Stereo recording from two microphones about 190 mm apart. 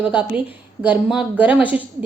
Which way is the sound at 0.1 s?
10° right (ahead or behind).